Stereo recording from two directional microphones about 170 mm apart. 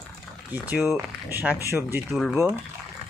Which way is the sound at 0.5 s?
10° right (ahead or behind).